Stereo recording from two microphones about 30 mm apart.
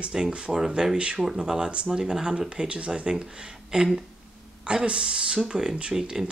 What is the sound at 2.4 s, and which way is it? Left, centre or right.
Speech, right.